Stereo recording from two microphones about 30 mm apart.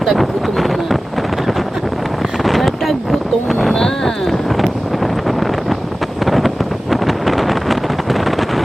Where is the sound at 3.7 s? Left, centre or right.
Centre.